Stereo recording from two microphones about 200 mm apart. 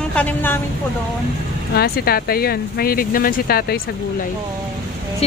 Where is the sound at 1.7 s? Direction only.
50° left (ahead or behind).